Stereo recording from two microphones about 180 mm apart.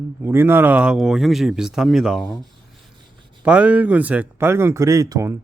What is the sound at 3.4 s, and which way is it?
Speech, 5° right (ahead or behind).